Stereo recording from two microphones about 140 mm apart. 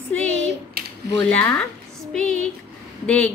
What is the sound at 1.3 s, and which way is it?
A woman's voice, 10° left (ahead or behind).